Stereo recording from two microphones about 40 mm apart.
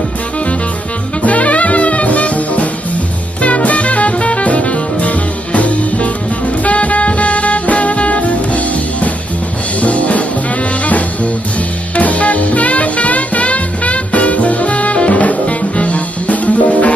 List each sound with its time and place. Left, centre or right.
1.2 s music: left
11.9 s music: left